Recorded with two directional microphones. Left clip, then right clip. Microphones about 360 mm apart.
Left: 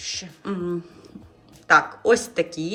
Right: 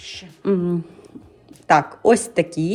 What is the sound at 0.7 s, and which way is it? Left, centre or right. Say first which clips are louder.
A woman's voice: right 3 dB; centre.